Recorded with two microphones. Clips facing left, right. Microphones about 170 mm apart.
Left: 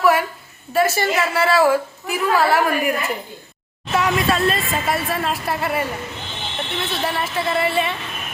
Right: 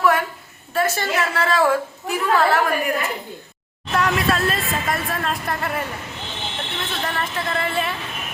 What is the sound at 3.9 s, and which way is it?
Speech, centre (ahead or behind).